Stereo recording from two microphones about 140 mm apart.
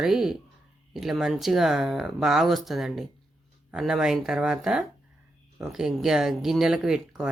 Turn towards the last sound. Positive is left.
turn(degrees=-5)  # may be behind; listen again after turning